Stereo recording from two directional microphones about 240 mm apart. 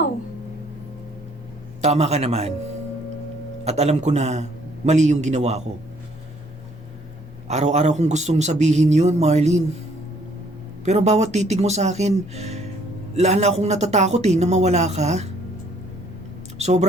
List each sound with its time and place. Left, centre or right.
1.8 s a man's voice: right
3.6 s a man's voice: right
7.4 s a man's voice: right
10.8 s a man's voice: right
16.6 s a sound: right